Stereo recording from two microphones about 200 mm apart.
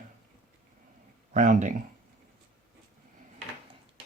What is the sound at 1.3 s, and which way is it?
Speech, 40° right (ahead or behind).